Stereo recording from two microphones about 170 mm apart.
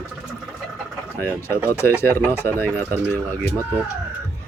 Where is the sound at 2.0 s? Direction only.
15° left (ahead or behind).